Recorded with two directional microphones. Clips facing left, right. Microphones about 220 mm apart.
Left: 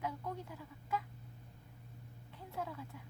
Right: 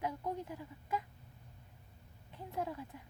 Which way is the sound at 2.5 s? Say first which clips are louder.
Right 3 dB; 20° right (ahead or behind).